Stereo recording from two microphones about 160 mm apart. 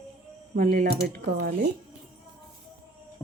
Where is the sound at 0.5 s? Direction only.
60° right (ahead or behind).